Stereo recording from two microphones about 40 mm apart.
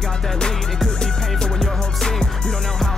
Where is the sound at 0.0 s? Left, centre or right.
Centre.